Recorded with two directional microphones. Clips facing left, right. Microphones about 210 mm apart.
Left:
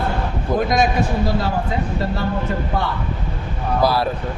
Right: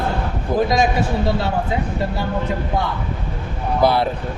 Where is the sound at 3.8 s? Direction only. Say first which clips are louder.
Right 2 dB; 25° right (ahead or behind).